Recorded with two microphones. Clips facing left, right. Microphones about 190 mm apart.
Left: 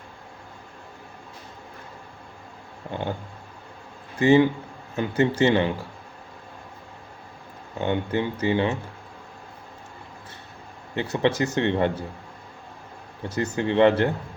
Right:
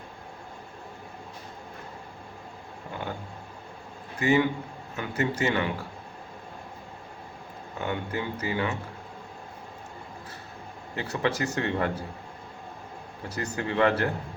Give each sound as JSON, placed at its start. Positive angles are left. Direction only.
{"t": 2.9, "sound": "speech", "side_deg": 25}
{"t": 4.2, "sound": "speech", "side_deg": 30}
{"t": 7.8, "sound": "speech", "side_deg": 25}
{"t": 10.9, "sound": "speech", "side_deg": 25}
{"t": 13.2, "sound": "speech", "side_deg": 25}